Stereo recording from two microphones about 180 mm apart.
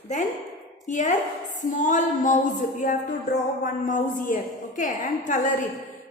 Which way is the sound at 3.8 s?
45° left (ahead or behind).